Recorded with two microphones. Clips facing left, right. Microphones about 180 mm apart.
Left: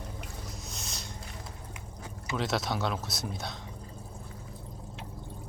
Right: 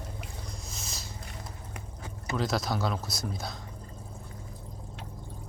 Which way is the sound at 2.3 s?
Centre (ahead or behind).